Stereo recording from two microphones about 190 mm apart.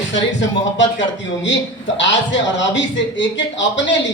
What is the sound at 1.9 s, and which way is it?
Speech, 75° left (ahead or behind).